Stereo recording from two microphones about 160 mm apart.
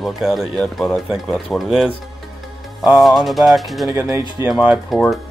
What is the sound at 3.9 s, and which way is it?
Speech, 20° right (ahead or behind).